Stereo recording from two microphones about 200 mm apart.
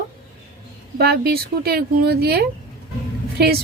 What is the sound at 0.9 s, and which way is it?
A woman's voice, 50° right (ahead or behind).